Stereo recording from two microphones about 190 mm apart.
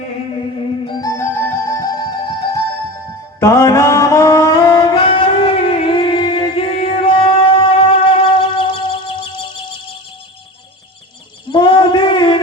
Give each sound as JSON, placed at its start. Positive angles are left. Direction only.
{"t": 0.9, "sound": "music", "side_deg": 20}
{"t": 3.4, "sound": "singing", "side_deg": 15}
{"t": 11.5, "sound": "a sound", "side_deg": 25}